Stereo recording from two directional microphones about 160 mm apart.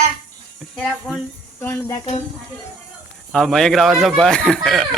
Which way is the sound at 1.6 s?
15° left (ahead or behind).